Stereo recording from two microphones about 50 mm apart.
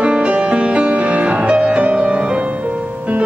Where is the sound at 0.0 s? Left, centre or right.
Right.